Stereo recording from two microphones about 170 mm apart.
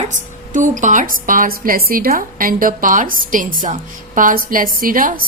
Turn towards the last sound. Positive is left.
turn(degrees=-55)  # may be behind; listen again after turning